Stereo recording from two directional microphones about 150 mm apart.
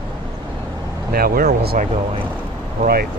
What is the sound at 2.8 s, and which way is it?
Speech, 85° right.